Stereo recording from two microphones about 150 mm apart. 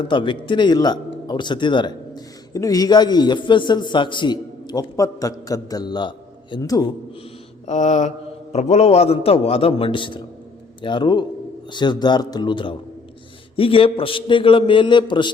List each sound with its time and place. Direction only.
0.0 s a man's voice: 30° left (ahead or behind)
7.7 s mantra: 50° left (ahead or behind)
8.5 s a man's voice: 45° left (ahead or behind)